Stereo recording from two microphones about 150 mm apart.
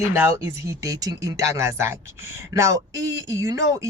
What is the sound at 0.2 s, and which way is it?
Speech, 20° right (ahead or behind).